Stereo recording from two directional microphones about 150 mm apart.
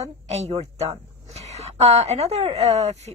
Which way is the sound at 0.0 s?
45° right (ahead or behind).